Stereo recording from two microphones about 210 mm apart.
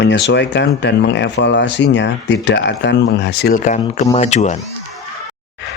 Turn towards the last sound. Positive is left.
turn(degrees=35)  # may be behind; listen again after turning